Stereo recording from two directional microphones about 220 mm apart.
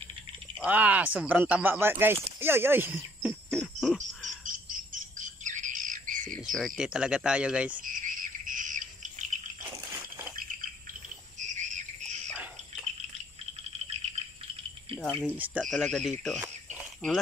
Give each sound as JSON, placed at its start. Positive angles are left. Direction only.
{"t": 0.6, "sound": "speech", "side_deg": -5}
{"t": 4.5, "sound": "bird", "side_deg": -40}
{"t": 6.3, "sound": "speech", "side_deg": 0}
{"t": 7.8, "sound": "bird", "side_deg": -35}
{"t": 11.3, "sound": "bird", "side_deg": -35}
{"t": 15.3, "sound": "speech", "side_deg": -5}
{"t": 15.6, "sound": "speech", "side_deg": 5}